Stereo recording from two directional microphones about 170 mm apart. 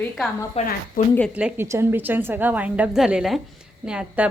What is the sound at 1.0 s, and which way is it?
Speech, 55° left (ahead or behind).